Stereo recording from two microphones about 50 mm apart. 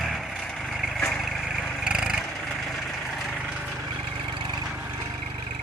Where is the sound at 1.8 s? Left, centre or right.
Centre.